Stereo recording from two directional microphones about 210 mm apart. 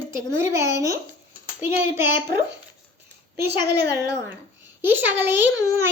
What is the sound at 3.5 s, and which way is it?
Speech, 50° right (ahead or behind).